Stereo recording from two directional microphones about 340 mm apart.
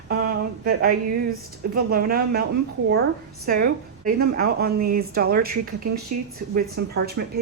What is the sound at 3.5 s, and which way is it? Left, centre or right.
Speech, right.